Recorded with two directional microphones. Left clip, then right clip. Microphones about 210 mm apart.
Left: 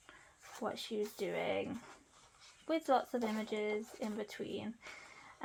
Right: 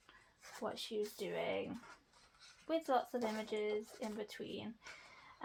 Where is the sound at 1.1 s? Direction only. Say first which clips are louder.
Left 5 dB; 35° left (ahead or behind).